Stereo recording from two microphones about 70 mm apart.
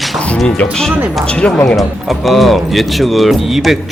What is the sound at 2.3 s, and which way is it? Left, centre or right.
Speech, centre.